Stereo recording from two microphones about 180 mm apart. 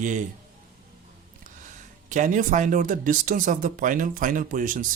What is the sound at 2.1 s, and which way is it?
Speech, 45° right (ahead or behind).